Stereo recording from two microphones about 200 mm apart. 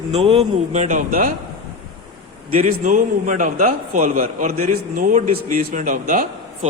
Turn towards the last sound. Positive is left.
turn(degrees=-40)  # may be behind; listen again after turning